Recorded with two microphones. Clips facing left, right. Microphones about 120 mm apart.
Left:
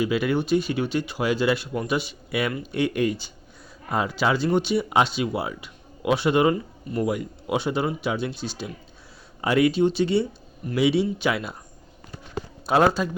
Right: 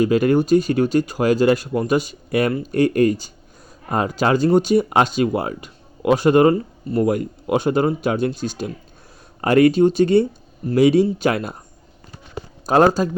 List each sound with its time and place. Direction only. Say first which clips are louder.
0.0 s speech: right 7 dB; 45° right (ahead or behind)
12.6 s speech: right 5 dB; 40° right (ahead or behind)